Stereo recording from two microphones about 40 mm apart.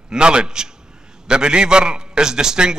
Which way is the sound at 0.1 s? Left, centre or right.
Right.